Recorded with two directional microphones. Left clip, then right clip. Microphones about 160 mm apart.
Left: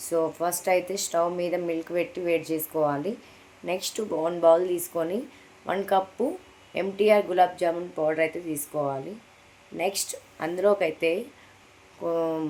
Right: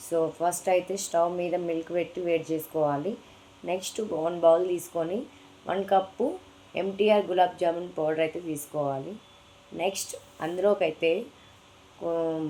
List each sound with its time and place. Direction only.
0.1 s a woman's voice: 15° left (ahead or behind)